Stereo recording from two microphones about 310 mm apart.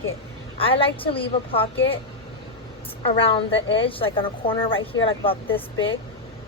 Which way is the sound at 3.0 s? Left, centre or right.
Centre.